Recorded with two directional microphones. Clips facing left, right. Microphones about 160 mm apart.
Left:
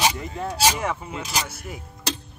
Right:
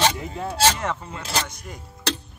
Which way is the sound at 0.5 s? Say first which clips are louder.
Right 1 dB; 10° left (ahead or behind).